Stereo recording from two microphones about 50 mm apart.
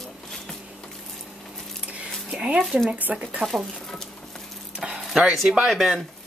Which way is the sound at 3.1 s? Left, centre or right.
Right.